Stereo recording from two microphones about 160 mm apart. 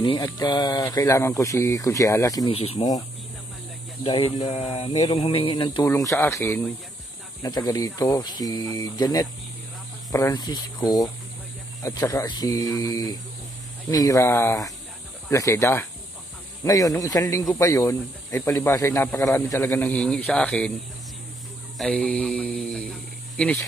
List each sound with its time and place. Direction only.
0.0 s speech: 30° left (ahead or behind)
2.5 s speech: 40° left (ahead or behind)
4.0 s speech: 35° left (ahead or behind)
5.9 s speech: 20° left (ahead or behind)
21.7 s a man's voice: 5° left (ahead or behind)